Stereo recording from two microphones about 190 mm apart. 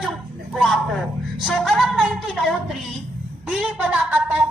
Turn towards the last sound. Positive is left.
turn(degrees=-10)  # may be behind; listen again after turning